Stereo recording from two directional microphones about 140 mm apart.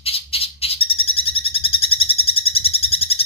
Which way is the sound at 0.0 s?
45° left (ahead or behind).